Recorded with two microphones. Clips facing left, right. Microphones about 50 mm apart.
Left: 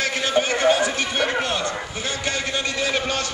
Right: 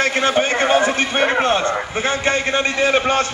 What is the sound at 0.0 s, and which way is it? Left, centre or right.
A man's voice, right.